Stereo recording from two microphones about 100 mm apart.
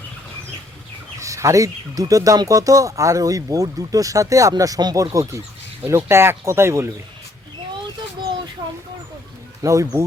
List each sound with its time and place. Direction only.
1.2 s speech: 30° right (ahead or behind)
9.6 s speech: 30° right (ahead or behind)